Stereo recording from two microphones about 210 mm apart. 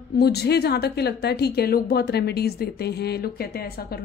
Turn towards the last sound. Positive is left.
turn(degrees=45)  # may be behind; listen again after turning